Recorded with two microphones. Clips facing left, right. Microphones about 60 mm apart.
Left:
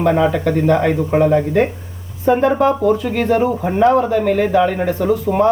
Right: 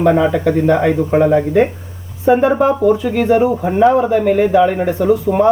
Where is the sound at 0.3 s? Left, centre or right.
Centre.